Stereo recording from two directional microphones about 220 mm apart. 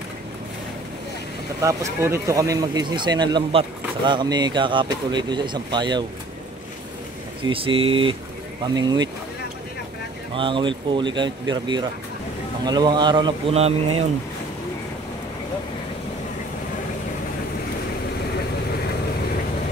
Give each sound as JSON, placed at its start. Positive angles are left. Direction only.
{"t": 1.6, "sound": "speech", "side_deg": -15}
{"t": 7.4, "sound": "speech", "side_deg": -25}
{"t": 10.3, "sound": "speech", "side_deg": -20}